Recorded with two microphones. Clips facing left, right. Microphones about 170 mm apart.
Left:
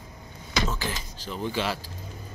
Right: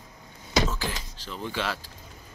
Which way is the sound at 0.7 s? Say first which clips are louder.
Left 1 dB; centre (ahead or behind).